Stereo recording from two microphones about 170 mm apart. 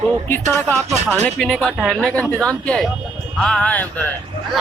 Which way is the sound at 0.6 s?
5° left (ahead or behind).